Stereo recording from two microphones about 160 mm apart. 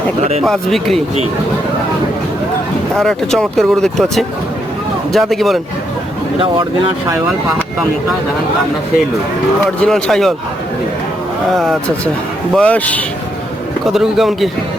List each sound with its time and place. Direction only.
0.4 s speech: centre (ahead or behind)
2.9 s speech: centre (ahead or behind)
6.4 s speech: 35° right (ahead or behind)
9.8 s speech: centre (ahead or behind)
11.5 s speech: centre (ahead or behind)
13.8 s speech: centre (ahead or behind)